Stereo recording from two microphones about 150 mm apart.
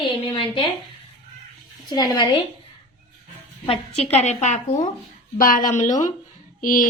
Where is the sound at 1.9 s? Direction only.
25° left (ahead or behind).